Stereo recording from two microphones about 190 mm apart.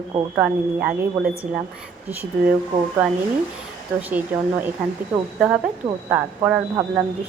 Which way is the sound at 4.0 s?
10° right (ahead or behind).